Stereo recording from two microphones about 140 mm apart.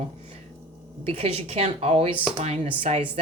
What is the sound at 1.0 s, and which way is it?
Speech, 45° right (ahead or behind).